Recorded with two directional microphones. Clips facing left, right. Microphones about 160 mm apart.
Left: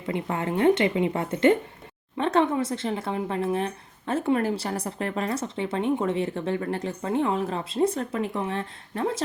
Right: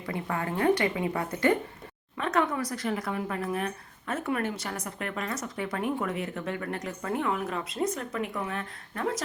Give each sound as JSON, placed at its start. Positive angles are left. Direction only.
{"t": 0.0, "sound": "speech", "side_deg": 20}